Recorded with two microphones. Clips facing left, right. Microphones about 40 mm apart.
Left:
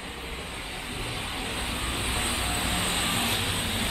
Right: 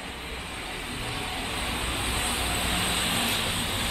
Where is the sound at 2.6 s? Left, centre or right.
Centre.